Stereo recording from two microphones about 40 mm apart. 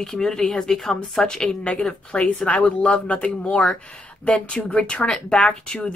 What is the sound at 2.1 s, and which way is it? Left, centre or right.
Speech, left.